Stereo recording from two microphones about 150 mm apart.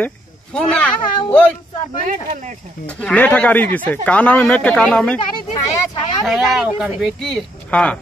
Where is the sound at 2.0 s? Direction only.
60° right (ahead or behind).